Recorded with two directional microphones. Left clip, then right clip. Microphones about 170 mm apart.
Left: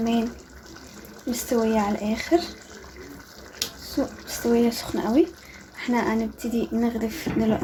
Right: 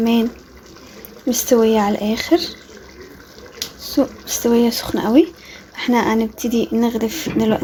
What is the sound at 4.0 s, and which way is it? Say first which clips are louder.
Speech: right 9 dB; 50° right (ahead or behind).